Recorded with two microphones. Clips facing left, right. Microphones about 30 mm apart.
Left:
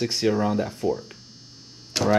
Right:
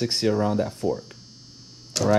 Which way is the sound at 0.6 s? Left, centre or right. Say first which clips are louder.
Right 1 dB; left.